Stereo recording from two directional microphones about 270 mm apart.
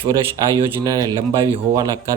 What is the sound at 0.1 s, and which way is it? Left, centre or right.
Speech, centre.